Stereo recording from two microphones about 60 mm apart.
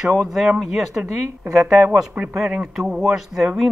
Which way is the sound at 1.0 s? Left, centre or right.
Centre.